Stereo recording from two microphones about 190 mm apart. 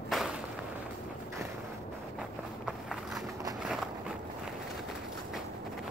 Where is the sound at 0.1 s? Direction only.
Centre (ahead or behind).